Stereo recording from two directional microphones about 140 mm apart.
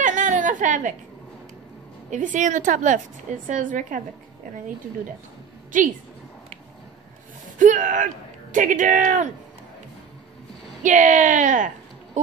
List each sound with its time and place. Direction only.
0.0 s a sound: 65° right (ahead or behind)
2.0 s a woman's voice: 65° right (ahead or behind)
5.7 s speech: 70° right (ahead or behind)
7.5 s speech: 70° right (ahead or behind)
10.8 s speech: 65° right (ahead or behind)